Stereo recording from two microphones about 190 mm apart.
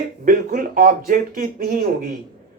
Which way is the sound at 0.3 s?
45° right (ahead or behind).